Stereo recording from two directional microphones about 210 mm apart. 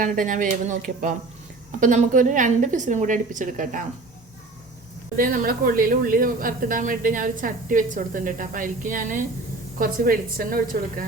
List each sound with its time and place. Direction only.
0.0 s a woman's voice: 40° right (ahead or behind)
5.1 s a woman's voice: 40° right (ahead or behind)